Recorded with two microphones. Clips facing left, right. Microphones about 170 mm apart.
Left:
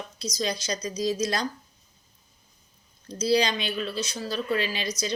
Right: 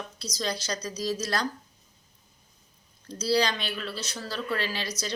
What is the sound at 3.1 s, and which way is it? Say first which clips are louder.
A woman's voice: left 2 dB; 15° left (ahead or behind).